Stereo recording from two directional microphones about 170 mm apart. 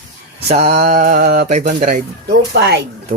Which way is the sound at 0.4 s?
40° right (ahead or behind).